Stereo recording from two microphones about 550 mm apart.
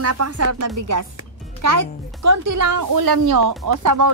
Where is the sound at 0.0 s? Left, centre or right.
Right.